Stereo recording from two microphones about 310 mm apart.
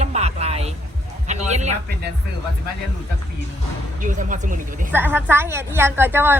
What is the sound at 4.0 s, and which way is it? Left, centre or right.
Speech, right.